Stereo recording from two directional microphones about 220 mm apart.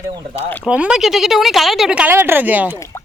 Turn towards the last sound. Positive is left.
turn(degrees=15)  # may be behind; listen again after turning